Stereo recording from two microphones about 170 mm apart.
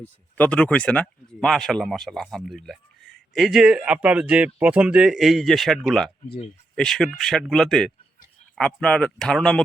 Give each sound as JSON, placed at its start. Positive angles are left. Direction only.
{"t": 0.0, "sound": "speech", "side_deg": 10}
{"t": 6.2, "sound": "speech", "side_deg": 35}
{"t": 6.7, "sound": "speech", "side_deg": 5}